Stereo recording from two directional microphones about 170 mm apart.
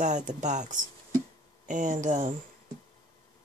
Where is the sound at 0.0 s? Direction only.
45° right (ahead or behind).